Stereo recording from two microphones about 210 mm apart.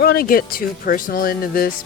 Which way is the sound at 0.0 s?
45° left (ahead or behind).